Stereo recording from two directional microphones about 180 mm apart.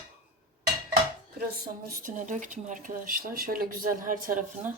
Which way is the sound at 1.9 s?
45° right (ahead or behind).